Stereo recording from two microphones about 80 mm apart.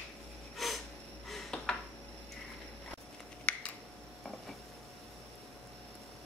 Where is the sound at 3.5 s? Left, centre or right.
Centre.